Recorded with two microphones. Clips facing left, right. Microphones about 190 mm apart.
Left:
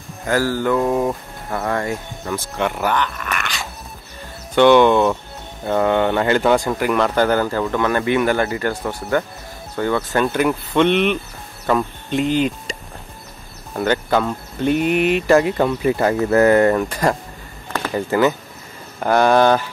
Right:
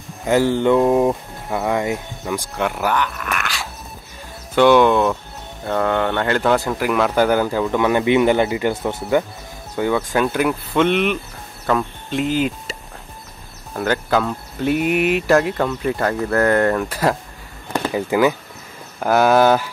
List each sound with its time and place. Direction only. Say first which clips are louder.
0.3 s mantra: right 3 dB; 25° right (ahead or behind)
1.5 s speech: right 2 dB; 15° right (ahead or behind)
2.5 s speech: left 1 dB; 5° right (ahead or behind)
13.7 s speech: left 1 dB; centre (ahead or behind)